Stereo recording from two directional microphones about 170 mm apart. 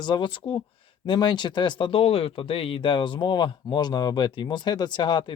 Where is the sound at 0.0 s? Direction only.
25° left (ahead or behind).